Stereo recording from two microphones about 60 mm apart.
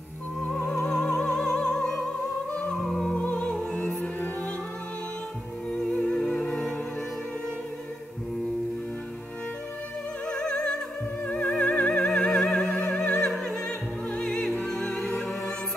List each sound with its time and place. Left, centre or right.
0.6 s music: centre
2.8 s music: centre
3.2 s music: centre
5.7 s music: centre
10.2 s opera: centre
11.2 s music: centre
13.3 s opera: centre
14.1 s music: centre
15.0 s music: centre